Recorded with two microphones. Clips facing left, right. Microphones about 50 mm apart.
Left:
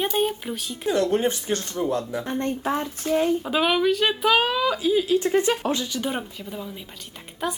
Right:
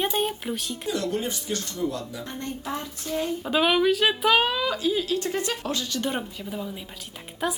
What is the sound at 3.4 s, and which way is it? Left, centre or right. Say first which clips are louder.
Speech: even; centre.